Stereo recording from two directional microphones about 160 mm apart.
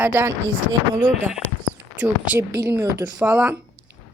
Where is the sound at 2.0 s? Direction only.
10° right (ahead or behind).